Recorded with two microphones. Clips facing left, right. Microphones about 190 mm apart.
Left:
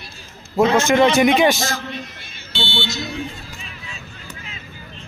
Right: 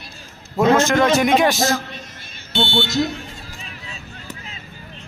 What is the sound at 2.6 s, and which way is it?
Speech, 50° right (ahead or behind).